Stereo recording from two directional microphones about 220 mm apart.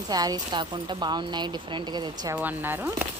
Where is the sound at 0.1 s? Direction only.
15° right (ahead or behind).